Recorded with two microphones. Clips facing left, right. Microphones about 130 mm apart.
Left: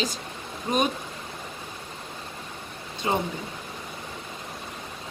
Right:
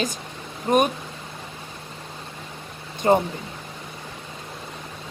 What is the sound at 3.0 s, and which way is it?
Speech, 45° right (ahead or behind).